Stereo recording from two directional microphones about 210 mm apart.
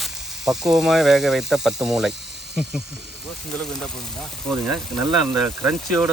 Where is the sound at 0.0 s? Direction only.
Centre (ahead or behind).